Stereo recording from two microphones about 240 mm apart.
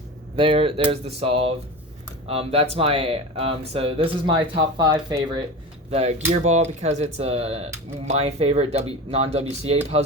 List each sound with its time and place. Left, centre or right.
0.3 s speech: right